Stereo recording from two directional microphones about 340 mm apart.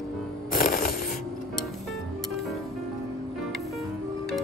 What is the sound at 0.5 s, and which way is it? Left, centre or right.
Mechanisms, left.